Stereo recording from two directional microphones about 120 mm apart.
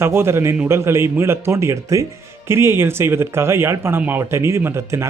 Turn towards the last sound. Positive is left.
turn(degrees=-20)  # may be behind; listen again after turning